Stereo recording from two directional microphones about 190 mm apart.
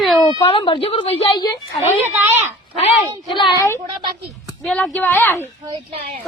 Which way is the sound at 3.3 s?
25° left (ahead or behind).